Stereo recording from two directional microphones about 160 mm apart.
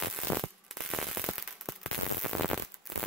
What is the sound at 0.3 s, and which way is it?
Fireworks, 5° left (ahead or behind).